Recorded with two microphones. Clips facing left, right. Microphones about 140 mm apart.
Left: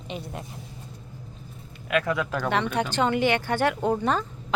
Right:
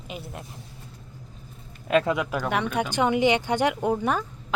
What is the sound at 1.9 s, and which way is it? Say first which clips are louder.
Speech: right 3 dB; 30° right (ahead or behind).